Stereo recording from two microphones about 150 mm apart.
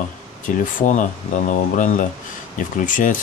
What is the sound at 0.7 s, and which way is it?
Speech, 60° left (ahead or behind).